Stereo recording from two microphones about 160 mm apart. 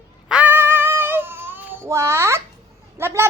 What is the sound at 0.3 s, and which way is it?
Child singing, 10° right (ahead or behind).